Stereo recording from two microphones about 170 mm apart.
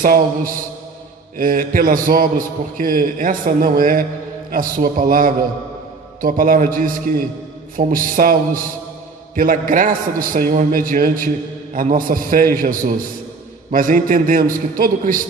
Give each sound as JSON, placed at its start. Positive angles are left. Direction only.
{"t": 0.0, "sound": "a man's voice", "side_deg": -55}